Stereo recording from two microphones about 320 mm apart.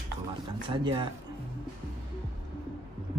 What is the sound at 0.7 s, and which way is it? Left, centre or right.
Speech, centre.